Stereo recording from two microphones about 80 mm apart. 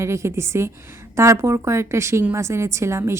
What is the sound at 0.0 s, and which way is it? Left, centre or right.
A woman's voice, right.